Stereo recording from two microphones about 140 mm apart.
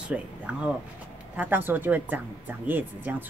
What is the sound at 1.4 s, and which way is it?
A woman's voice, 15° right (ahead or behind).